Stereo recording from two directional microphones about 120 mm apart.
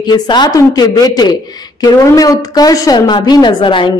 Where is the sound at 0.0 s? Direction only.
40° left (ahead or behind).